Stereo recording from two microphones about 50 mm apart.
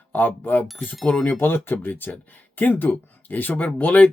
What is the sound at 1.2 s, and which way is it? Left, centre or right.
Speech, left.